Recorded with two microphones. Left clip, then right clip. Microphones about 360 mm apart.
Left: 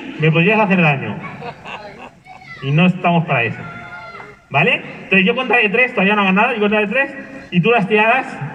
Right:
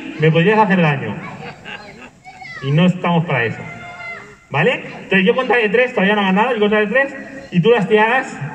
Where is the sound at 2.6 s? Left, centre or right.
Centre.